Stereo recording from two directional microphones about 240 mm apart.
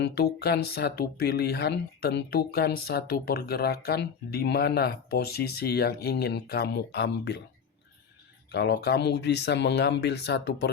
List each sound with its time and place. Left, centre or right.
0.0 s speech: left
8.5 s speech: left